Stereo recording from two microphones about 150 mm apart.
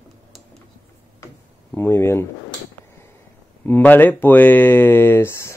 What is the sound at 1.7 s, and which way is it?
Speech, 15° left (ahead or behind).